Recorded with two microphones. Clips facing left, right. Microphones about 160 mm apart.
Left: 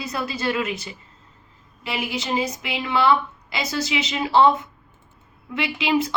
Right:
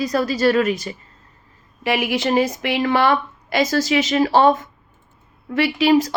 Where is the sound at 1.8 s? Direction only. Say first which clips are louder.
Right 8 dB; 65° right (ahead or behind).